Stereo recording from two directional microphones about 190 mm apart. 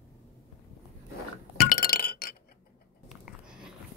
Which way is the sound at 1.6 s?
50° left (ahead or behind).